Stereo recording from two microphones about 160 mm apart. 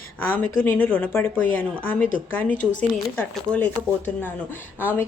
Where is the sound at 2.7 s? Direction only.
10° left (ahead or behind).